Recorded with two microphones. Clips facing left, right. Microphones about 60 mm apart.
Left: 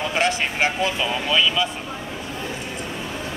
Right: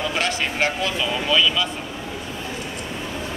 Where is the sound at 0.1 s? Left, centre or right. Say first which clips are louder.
Left 2 dB; centre.